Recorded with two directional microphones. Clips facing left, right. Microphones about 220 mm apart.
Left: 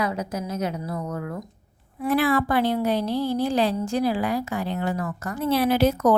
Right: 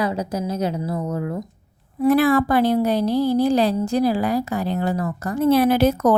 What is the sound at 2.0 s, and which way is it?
A woman's voice, 45° right (ahead or behind).